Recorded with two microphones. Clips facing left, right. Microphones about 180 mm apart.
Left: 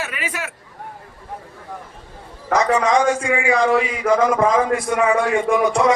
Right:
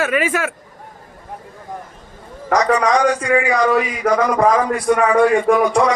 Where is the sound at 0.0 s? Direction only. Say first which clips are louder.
Right 10 dB; 50° right (ahead or behind).